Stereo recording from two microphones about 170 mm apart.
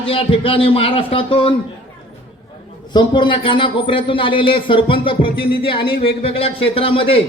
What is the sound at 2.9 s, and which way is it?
Speech, 25° left (ahead or behind).